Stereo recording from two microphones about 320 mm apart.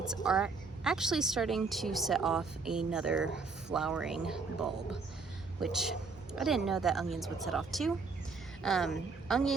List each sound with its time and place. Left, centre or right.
0.1 s a woman's voice: centre